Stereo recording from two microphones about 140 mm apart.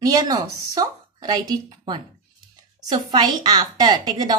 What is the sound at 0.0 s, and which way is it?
A woman's voice, 25° right (ahead or behind).